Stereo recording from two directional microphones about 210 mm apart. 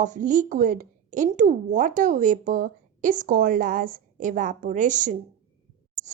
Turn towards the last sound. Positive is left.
turn(degrees=-35)  # may be behind; listen again after turning